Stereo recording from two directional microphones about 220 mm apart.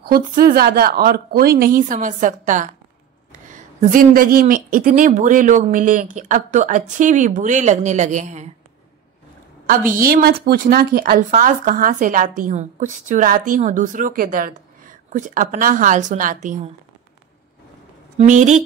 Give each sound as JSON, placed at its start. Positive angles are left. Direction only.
{"t": 0.1, "sound": "speech", "side_deg": -40}
{"t": 9.7, "sound": "speech", "side_deg": -40}
{"t": 18.1, "sound": "speech", "side_deg": -35}